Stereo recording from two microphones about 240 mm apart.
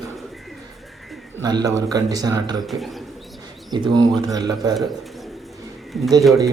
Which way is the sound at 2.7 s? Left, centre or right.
Centre.